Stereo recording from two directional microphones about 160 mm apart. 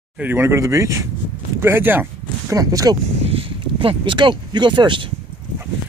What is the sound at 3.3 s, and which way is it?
Speech, 35° right (ahead or behind).